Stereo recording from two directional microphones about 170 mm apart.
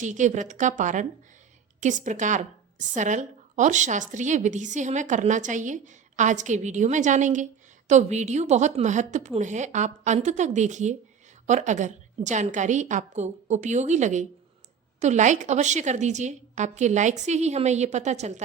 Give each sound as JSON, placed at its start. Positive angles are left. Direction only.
{"t": 0.0, "sound": "a woman's voice", "side_deg": -45}